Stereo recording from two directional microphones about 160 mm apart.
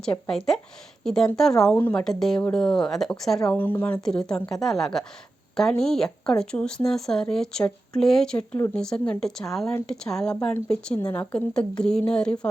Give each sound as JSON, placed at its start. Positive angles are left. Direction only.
{"t": 0.3, "sound": "speech", "side_deg": 0}